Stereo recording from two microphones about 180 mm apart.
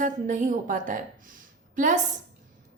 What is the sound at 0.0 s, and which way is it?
A woman's voice, 45° right (ahead or behind).